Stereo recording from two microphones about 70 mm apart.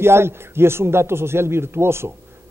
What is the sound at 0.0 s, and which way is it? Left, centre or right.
Speech, right.